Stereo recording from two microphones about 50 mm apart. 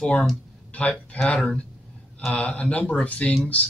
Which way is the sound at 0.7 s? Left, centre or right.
Left.